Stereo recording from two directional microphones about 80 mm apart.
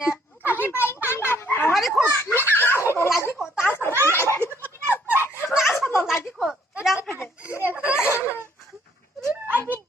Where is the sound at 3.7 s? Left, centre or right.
Left.